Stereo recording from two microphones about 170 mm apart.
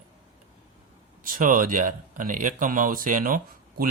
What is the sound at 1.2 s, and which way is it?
Speech, 55° right (ahead or behind).